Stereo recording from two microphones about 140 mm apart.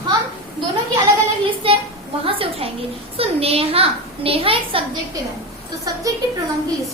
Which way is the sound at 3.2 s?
45° right (ahead or behind).